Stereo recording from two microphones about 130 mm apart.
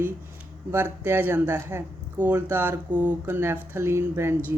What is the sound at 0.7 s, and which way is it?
Speech, 15° right (ahead or behind).